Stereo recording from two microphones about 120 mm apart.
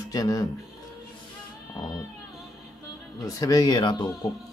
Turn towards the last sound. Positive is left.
turn(degrees=35)  # may be behind; listen again after turning